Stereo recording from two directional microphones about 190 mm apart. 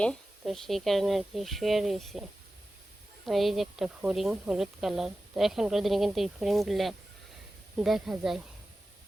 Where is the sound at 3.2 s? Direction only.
Centre (ahead or behind).